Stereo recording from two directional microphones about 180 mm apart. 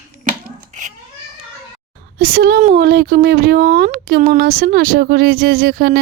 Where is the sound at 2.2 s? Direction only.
55° right (ahead or behind).